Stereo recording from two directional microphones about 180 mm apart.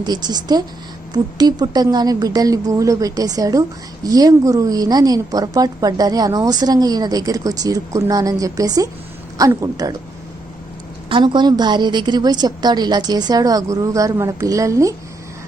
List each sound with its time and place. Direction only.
0.0 s a woman's voice: 25° right (ahead or behind)
11.1 s a woman's voice: 25° right (ahead or behind)